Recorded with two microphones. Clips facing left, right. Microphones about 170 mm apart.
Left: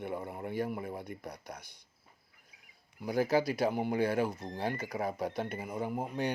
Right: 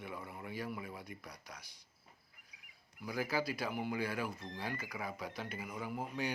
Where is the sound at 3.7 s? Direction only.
55° left (ahead or behind).